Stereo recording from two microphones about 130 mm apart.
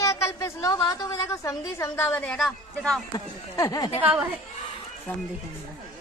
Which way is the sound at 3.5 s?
25° left (ahead or behind).